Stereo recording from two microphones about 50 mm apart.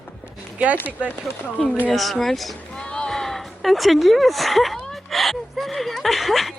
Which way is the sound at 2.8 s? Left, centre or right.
Centre.